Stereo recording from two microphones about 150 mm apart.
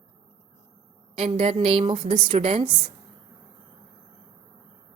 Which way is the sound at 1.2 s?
40° right (ahead or behind).